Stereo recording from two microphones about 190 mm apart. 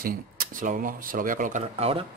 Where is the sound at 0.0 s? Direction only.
50° right (ahead or behind).